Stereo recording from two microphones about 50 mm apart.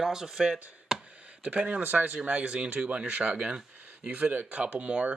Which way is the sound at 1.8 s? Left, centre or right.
Right.